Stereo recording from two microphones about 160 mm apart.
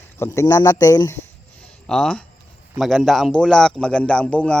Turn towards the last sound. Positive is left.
turn(degrees=10)  # may be behind; listen again after turning